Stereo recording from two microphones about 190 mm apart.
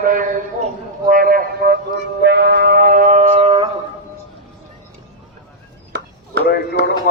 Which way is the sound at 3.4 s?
30° right (ahead or behind).